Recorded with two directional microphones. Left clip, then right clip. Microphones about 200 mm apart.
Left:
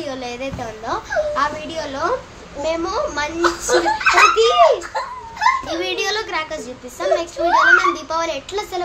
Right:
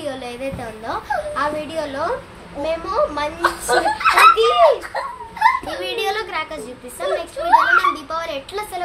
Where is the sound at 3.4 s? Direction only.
15° right (ahead or behind).